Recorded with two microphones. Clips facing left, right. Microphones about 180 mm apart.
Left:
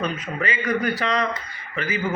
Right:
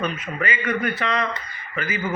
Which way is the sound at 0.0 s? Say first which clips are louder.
Even; 30° left (ahead or behind).